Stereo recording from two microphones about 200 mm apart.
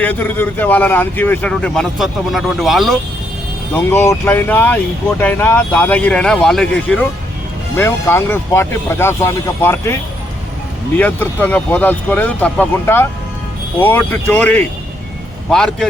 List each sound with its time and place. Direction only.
0.0 s speech: 10° left (ahead or behind)
3.8 s speech: 10° left (ahead or behind)